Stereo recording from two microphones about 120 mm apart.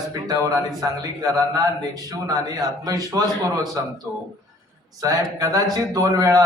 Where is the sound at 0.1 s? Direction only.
30° right (ahead or behind).